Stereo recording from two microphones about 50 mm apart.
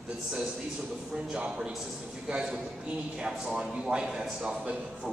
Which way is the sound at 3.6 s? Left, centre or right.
Centre.